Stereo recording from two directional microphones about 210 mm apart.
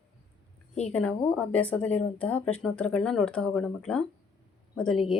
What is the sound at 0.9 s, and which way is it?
A woman's voice, 5° left (ahead or behind).